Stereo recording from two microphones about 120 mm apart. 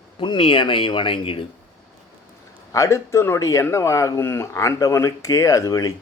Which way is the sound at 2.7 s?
25° left (ahead or behind).